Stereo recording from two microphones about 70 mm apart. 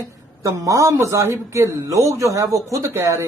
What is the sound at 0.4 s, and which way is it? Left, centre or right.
A man's voice, right.